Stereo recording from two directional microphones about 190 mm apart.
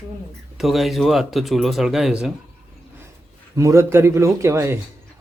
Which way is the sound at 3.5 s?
15° right (ahead or behind).